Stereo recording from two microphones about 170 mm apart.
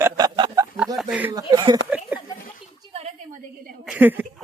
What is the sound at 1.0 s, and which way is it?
Speech, 5° right (ahead or behind).